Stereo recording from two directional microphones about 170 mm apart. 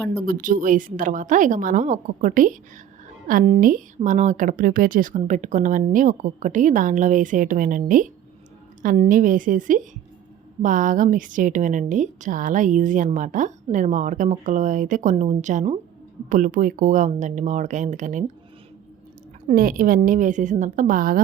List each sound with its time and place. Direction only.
0.3 s a woman's voice: 55° right (ahead or behind)
19.5 s a woman's voice: 55° right (ahead or behind)